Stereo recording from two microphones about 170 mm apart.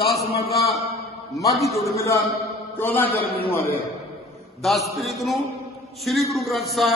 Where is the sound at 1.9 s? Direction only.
15° left (ahead or behind).